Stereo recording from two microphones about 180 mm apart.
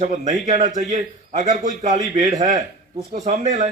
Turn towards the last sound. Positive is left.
turn(degrees=-40)  # may be behind; listen again after turning